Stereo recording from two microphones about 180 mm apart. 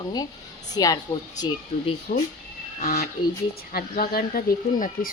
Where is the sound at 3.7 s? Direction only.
55° left (ahead or behind).